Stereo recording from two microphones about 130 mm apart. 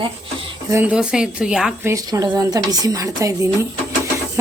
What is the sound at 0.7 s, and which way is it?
Speech, 10° right (ahead or behind).